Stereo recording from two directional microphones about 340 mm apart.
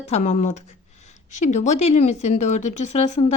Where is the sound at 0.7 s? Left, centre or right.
Centre.